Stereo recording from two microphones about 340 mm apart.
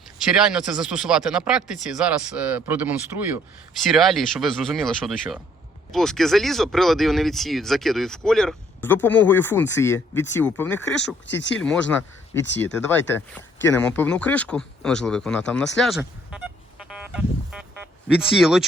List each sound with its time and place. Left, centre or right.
0.3 s speech: centre
11.3 s speech: left
11.6 s speech: centre
12.9 s speech: centre